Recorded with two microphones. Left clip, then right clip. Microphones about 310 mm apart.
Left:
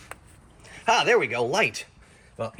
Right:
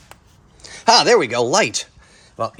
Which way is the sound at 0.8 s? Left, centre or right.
Right.